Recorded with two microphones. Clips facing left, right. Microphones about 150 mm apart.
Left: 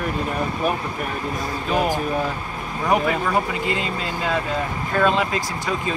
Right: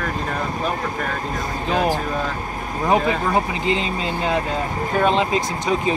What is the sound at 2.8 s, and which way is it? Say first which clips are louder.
Speech: right 1 dB; 20° right (ahead or behind).